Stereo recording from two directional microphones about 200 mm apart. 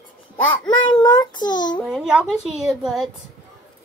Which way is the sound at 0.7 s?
20° left (ahead or behind).